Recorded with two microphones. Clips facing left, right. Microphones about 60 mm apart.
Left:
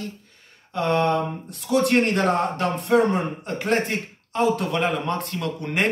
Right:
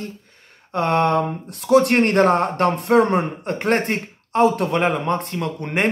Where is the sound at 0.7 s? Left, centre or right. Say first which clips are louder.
Right 3 dB; right.